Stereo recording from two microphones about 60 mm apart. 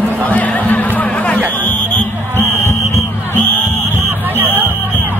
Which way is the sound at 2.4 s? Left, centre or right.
Left.